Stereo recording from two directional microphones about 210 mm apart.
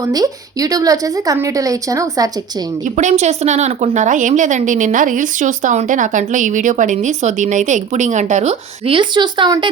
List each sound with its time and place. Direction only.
0.0 s a woman's voice: 15° right (ahead or behind)
2.9 s a woman's voice: 35° right (ahead or behind)